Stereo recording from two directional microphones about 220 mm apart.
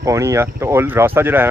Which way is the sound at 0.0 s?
15° right (ahead or behind).